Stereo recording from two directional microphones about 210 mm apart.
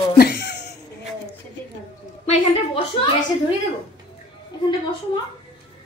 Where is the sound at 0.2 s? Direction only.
55° left (ahead or behind).